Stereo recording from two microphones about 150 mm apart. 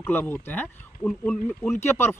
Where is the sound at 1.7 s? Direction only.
15° left (ahead or behind).